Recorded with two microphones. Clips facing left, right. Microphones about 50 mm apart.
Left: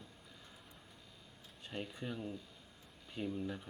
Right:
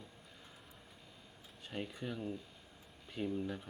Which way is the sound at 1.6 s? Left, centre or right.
Centre.